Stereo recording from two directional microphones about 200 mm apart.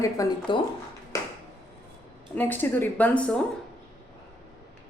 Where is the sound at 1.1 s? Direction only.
15° left (ahead or behind).